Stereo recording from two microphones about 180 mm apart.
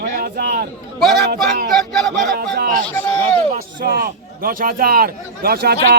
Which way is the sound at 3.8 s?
55° right (ahead or behind).